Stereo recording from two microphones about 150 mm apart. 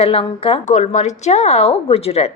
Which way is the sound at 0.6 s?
50° left (ahead or behind).